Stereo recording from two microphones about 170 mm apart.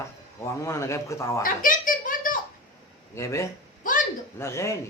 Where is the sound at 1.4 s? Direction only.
50° left (ahead or behind).